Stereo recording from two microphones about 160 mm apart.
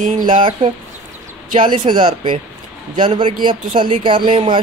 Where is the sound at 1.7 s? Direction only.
30° right (ahead or behind).